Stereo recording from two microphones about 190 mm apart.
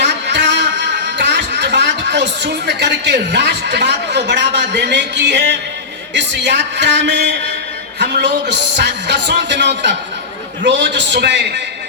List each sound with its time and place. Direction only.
0.0 s a man's voice: 65° right (ahead or behind)